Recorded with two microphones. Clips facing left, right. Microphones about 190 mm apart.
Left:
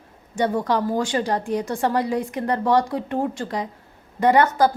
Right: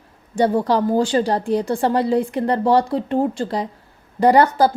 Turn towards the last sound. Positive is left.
turn(degrees=-30)  # may be behind; listen again after turning